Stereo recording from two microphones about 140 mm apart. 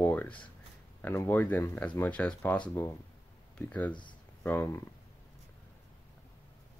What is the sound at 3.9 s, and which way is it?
Speech, 35° left (ahead or behind).